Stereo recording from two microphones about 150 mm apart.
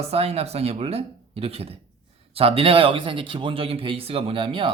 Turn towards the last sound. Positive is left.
turn(degrees=-40)  # may be behind; listen again after turning